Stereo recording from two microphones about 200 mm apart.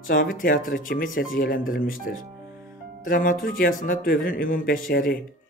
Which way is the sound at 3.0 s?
45° left (ahead or behind).